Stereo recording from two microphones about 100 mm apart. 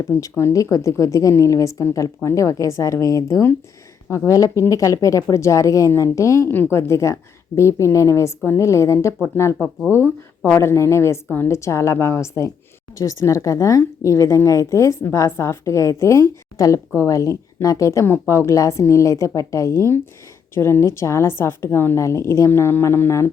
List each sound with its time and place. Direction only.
0.0 s a woman's voice: 30° left (ahead or behind)